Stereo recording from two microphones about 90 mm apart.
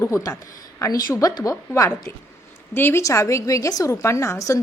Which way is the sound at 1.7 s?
30° left (ahead or behind).